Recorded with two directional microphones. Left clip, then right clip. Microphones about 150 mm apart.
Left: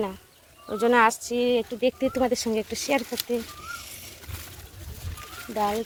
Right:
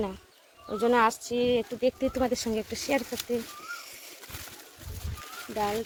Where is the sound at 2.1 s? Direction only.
10° left (ahead or behind).